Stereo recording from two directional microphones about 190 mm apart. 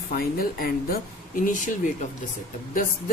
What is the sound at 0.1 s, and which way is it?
Speech, 50° left (ahead or behind).